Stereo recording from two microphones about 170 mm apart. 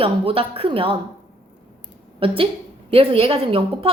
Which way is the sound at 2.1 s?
30° right (ahead or behind).